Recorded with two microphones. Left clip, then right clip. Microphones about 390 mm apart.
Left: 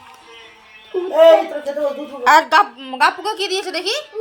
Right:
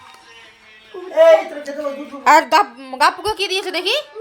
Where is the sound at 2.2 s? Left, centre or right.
Centre.